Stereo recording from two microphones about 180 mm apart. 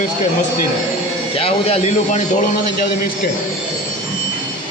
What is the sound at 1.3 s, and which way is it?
Speech, 30° left (ahead or behind).